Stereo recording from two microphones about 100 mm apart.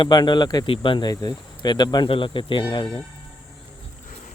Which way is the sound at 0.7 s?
55° left (ahead or behind).